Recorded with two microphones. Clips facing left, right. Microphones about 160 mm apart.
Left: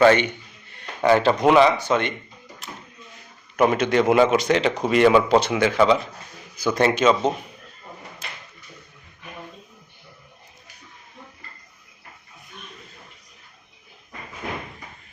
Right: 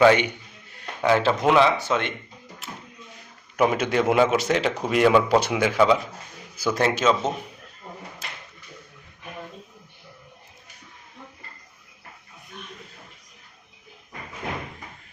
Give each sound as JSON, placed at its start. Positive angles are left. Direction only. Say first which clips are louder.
{"t": 0.0, "sound": "a man's voice", "louder": "left 1 dB", "side_deg": -10}
{"t": 3.6, "sound": "a man's voice", "louder": "left 3 dB", "side_deg": -5}